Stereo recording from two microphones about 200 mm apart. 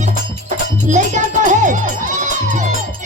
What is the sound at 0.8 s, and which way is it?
Music, 35° right (ahead or behind).